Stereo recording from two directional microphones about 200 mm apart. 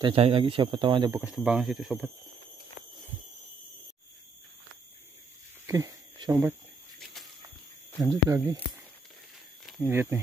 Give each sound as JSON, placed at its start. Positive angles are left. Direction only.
{"t": 0.0, "sound": "speech", "side_deg": -25}
{"t": 1.2, "sound": "speech", "side_deg": -5}
{"t": 5.7, "sound": "speech", "side_deg": -15}
{"t": 8.0, "sound": "speech", "side_deg": -15}